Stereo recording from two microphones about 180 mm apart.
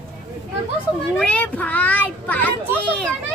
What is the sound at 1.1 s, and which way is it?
A child's voice, 5° left (ahead or behind).